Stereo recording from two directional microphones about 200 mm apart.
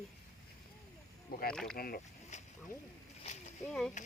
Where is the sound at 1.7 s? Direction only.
50° left (ahead or behind).